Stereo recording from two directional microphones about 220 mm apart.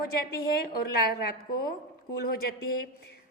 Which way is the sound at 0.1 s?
45° left (ahead or behind).